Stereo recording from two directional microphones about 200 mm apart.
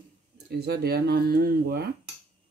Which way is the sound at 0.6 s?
55° right (ahead or behind).